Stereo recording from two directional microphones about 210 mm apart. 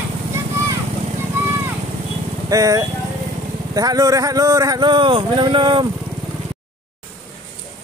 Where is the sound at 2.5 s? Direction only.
15° right (ahead or behind).